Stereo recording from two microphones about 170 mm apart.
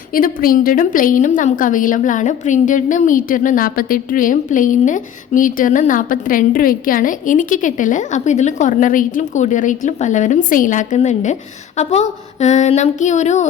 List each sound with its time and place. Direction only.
0.1 s a woman's voice: 55° left (ahead or behind)